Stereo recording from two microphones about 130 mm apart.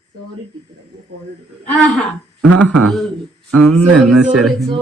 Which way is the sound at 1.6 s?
5° left (ahead or behind).